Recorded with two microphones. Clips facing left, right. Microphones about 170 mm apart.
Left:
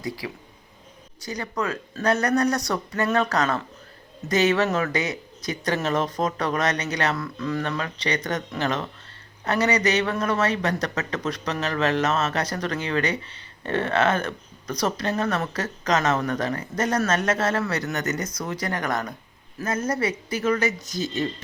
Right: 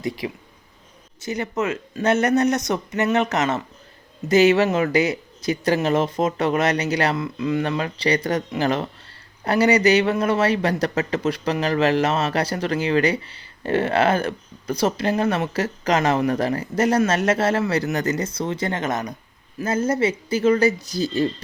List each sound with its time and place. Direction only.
0.2 s speech: 25° right (ahead or behind)
7.3 s speech: 15° right (ahead or behind)
7.7 s speech: 30° right (ahead or behind)